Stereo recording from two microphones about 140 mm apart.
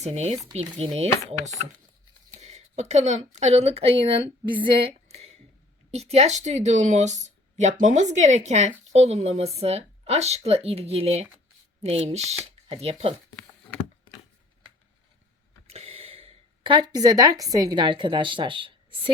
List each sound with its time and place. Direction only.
0.0 s a woman's voice: 50° right (ahead or behind)
5.0 s a sound: 50° right (ahead or behind)
5.9 s speech: 50° right (ahead or behind)
15.6 s gasp: 45° right (ahead or behind); by 17.4 s 25° right (ahead or behind)
17.5 s a woman's voice: 30° right (ahead or behind)